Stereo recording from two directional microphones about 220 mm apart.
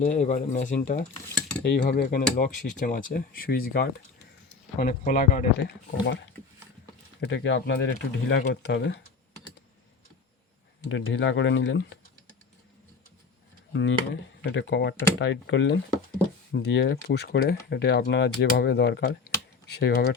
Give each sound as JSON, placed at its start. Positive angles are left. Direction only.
{"t": 0.0, "sound": "speech", "side_deg": 35}
{"t": 7.2, "sound": "speech", "side_deg": 55}
{"t": 10.8, "sound": "speech", "side_deg": 60}
{"t": 13.7, "sound": "speech", "side_deg": 55}